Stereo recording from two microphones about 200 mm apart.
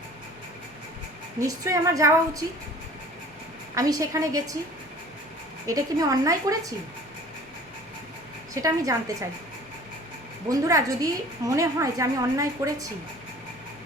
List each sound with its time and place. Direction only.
1.4 s a woman's voice: 15° right (ahead or behind)
3.8 s a woman's voice: 15° right (ahead or behind)
5.6 s a woman's voice: 15° right (ahead or behind)
8.6 s a woman's voice: 15° right (ahead or behind)
10.5 s a woman's voice: 15° right (ahead or behind)